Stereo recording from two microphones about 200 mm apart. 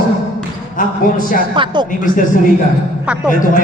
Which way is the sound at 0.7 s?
40° left (ahead or behind).